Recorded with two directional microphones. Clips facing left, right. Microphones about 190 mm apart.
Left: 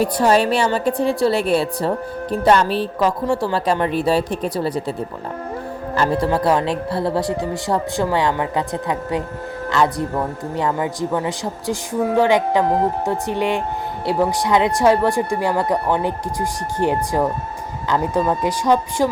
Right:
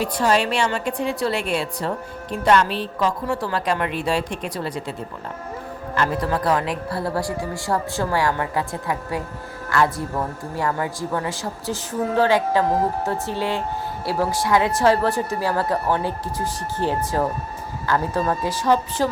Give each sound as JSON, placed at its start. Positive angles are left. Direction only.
{"t": 0.0, "sound": "a woman's voice", "side_deg": 40}